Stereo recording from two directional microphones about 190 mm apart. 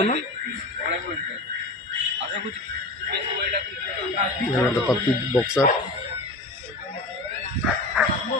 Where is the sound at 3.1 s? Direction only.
60° right (ahead or behind).